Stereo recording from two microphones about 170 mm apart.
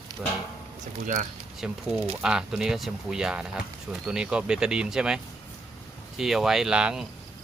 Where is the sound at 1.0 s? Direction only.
50° right (ahead or behind).